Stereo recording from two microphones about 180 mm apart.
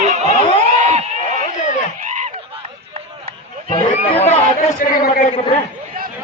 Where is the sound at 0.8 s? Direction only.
40° right (ahead or behind).